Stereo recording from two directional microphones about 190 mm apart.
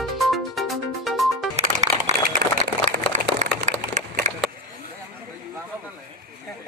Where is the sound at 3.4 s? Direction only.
40° right (ahead or behind).